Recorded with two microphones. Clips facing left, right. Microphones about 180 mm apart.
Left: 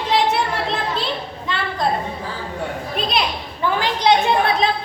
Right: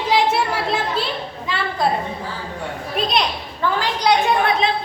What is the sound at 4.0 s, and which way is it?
Speech, 25° left (ahead or behind).